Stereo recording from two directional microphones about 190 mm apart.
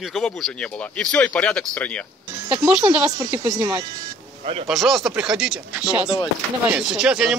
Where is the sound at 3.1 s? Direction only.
20° right (ahead or behind).